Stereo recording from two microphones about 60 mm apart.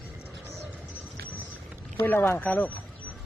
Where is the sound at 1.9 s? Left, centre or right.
Left.